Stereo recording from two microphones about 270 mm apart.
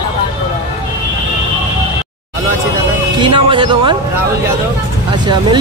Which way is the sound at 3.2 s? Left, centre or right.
Centre.